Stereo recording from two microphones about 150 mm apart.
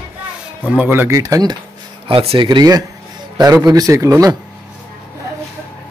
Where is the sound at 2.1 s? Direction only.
40° right (ahead or behind); by 4.4 s 20° right (ahead or behind).